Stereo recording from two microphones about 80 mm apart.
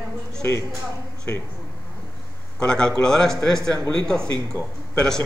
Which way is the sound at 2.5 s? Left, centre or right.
Centre.